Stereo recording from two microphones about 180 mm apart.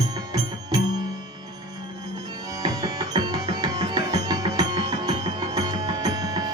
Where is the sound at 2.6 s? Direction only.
20° right (ahead or behind).